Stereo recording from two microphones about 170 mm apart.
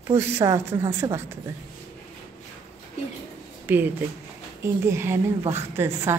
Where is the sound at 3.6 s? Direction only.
10° right (ahead or behind).